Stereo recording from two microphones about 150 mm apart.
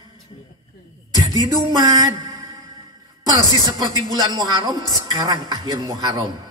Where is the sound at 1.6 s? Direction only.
25° right (ahead or behind).